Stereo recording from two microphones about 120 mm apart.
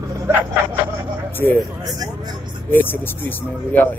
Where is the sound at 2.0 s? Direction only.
35° right (ahead or behind).